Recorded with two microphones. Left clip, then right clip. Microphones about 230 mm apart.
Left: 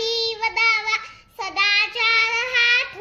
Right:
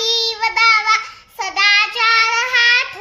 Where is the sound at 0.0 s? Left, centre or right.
Centre.